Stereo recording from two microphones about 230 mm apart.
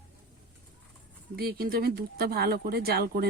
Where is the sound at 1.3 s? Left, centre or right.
Right.